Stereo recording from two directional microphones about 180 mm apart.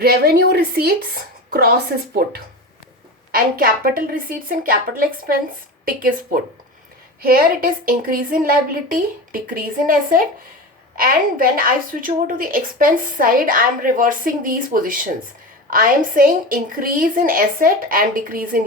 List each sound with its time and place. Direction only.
0.0 s a woman's voice: 60° right (ahead or behind)
5.8 s a woman's voice: 50° right (ahead or behind)